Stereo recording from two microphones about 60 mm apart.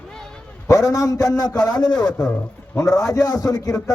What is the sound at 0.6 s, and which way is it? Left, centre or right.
Speech, left.